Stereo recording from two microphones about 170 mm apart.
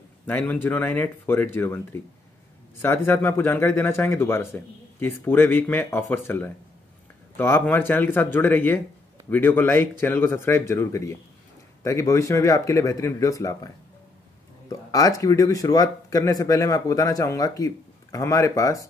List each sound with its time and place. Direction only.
0.3 s speech: 10° left (ahead or behind)
14.7 s speech: 20° left (ahead or behind)